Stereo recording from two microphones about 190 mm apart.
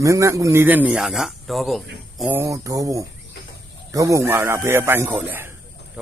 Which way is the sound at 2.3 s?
15° right (ahead or behind).